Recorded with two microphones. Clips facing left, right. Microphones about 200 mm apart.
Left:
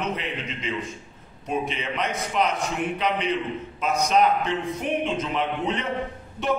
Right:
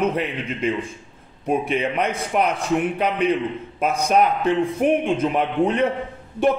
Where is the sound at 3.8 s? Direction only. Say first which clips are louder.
Right 3 dB; 55° right (ahead or behind).